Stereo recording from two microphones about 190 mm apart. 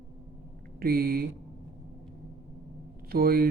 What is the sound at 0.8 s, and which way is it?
Speech, 50° right (ahead or behind).